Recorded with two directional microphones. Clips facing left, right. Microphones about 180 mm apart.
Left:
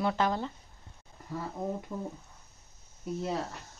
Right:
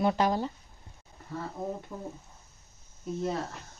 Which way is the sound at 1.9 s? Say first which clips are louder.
Left 3 dB; centre (ahead or behind).